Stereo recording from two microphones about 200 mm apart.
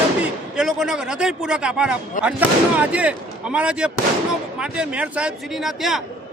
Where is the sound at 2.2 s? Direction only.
40° left (ahead or behind).